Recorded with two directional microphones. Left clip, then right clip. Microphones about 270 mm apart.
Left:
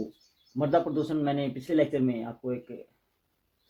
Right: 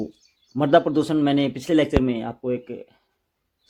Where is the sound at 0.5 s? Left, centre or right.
Right.